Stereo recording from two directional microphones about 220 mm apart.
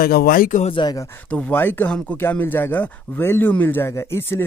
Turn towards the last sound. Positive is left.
turn(degrees=10)  # may be behind; listen again after turning